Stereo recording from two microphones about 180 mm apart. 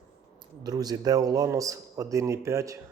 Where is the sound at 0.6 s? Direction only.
20° right (ahead or behind).